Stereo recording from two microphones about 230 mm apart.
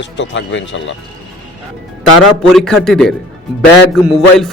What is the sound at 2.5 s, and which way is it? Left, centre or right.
A man's voice, centre.